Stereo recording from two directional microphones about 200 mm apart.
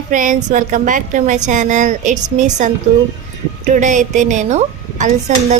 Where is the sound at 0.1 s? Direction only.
40° right (ahead or behind).